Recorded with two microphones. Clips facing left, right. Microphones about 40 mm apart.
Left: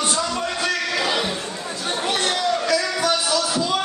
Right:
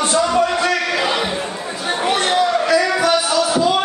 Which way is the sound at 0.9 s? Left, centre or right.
Right.